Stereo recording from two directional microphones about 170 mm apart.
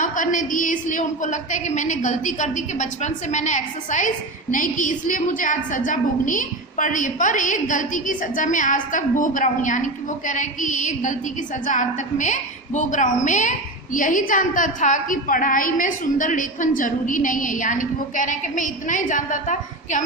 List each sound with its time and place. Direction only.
0.0 s a woman's voice: 50° left (ahead or behind)